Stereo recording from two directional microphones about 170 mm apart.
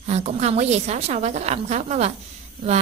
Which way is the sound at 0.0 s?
40° right (ahead or behind).